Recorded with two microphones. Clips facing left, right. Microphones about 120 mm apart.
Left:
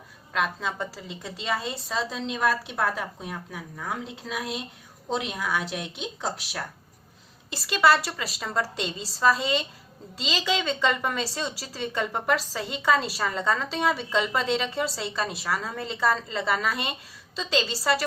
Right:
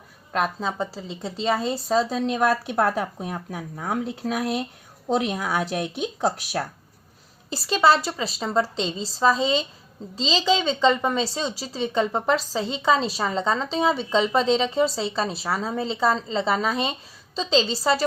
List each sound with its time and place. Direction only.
0.3 s a woman's voice: 35° right (ahead or behind)
7.5 s a woman's voice: 30° right (ahead or behind)